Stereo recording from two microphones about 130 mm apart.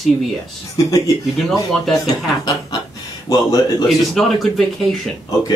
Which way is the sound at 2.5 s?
30° left (ahead or behind).